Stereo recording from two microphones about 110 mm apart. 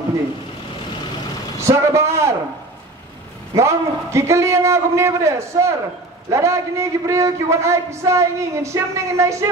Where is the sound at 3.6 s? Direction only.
25° right (ahead or behind).